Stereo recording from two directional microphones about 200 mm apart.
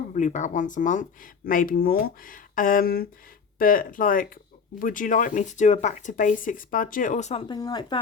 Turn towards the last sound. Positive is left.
turn(degrees=20)  # may be behind; listen again after turning